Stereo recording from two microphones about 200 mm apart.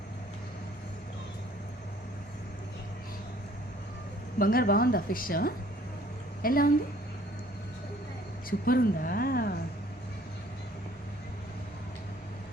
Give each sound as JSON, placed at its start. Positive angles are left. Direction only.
{"t": 4.4, "sound": "a woman's voice", "side_deg": 45}
{"t": 8.4, "sound": "a woman's voice", "side_deg": 45}